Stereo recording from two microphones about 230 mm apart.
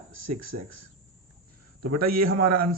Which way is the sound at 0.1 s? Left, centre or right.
Right.